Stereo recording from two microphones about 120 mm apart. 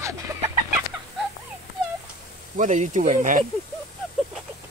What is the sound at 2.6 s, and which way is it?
Speech, 90° right.